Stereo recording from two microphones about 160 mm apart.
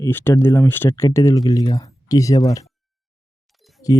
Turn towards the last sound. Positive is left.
turn(degrees=20)  # may be behind; listen again after turning